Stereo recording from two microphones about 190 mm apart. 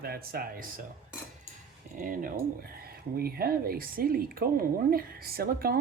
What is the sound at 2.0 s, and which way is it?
Speech, 45° right (ahead or behind).